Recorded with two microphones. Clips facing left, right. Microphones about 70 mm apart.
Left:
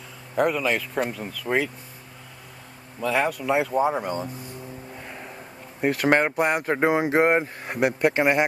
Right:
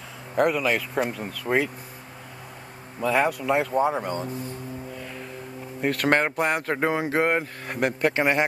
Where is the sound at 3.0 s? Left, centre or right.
Centre.